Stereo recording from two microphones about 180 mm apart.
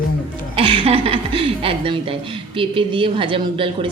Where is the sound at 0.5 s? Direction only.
30° right (ahead or behind).